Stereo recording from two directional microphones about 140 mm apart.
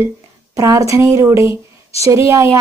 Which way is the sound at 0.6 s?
20° right (ahead or behind).